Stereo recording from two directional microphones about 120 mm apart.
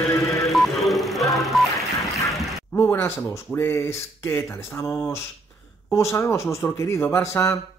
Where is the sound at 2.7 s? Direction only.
20° left (ahead or behind).